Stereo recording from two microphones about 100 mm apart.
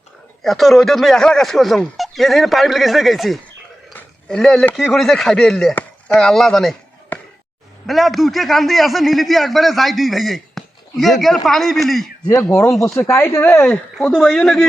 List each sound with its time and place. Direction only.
0.4 s speech: centre (ahead or behind)
7.9 s speech: centre (ahead or behind)
12.3 s speech: 30° left (ahead or behind)
13.6 s speech: 10° left (ahead or behind)